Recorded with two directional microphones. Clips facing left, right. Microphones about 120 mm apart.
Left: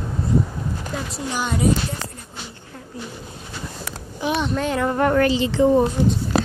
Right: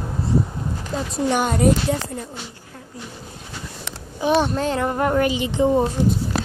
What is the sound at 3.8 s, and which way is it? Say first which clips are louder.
A child's voice: right 3 dB; 35° right (ahead or behind).